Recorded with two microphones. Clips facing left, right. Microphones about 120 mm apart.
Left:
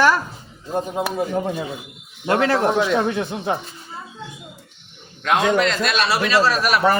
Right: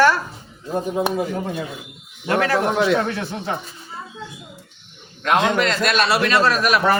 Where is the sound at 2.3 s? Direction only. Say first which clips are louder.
Left 1 dB; 25° left (ahead or behind).